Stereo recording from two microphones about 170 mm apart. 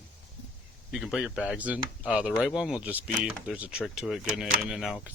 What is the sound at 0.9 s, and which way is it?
Speech, centre (ahead or behind).